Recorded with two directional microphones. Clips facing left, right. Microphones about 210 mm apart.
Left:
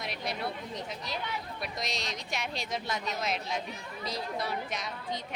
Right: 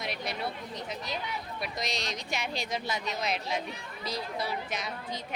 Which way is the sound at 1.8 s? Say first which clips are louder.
Right 2 dB; centre (ahead or behind).